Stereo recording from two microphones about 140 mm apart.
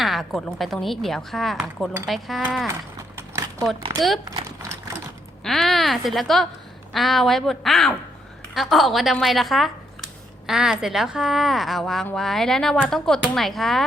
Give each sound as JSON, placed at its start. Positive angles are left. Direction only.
{"t": 0.0, "sound": "a woman's voice", "side_deg": 0}
{"t": 3.2, "sound": "a sound", "side_deg": -20}
{"t": 4.3, "sound": "horse", "side_deg": -20}
{"t": 5.4, "sound": "a woman's voice", "side_deg": 0}